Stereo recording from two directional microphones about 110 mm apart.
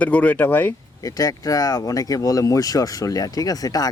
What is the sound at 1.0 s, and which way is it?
Speech, 35° left (ahead or behind).